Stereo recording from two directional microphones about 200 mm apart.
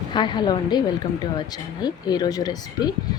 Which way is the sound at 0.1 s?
20° left (ahead or behind).